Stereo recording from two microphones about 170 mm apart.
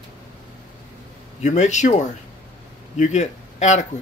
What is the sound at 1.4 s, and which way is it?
Speech, 45° left (ahead or behind).